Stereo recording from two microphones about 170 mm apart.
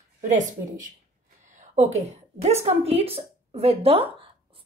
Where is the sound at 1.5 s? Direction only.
40° right (ahead or behind).